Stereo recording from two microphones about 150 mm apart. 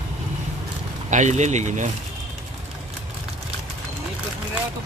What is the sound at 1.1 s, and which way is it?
Speech, 50° right (ahead or behind).